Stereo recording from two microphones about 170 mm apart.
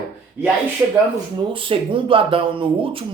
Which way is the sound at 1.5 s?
30° right (ahead or behind).